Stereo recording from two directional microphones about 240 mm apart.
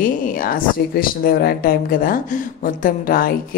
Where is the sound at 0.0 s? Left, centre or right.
Left.